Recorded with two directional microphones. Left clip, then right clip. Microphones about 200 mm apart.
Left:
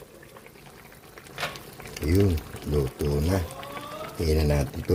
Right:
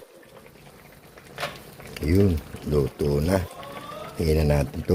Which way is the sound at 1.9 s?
20° right (ahead or behind).